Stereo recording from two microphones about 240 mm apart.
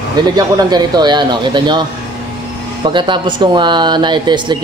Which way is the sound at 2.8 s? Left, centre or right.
Centre.